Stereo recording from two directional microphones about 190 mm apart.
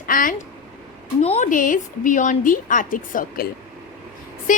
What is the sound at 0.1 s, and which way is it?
A woman's voice, 45° left (ahead or behind).